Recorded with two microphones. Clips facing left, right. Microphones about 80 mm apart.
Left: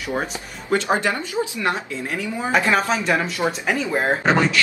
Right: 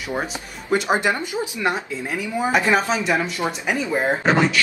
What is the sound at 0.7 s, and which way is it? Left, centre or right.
Speech, centre.